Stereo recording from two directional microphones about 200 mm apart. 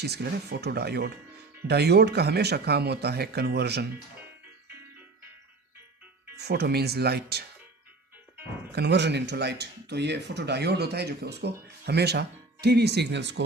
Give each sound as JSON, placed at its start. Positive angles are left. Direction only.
{"t": 0.0, "sound": "speech", "side_deg": -55}
{"t": 6.3, "sound": "speech", "side_deg": -55}
{"t": 8.7, "sound": "speech", "side_deg": -55}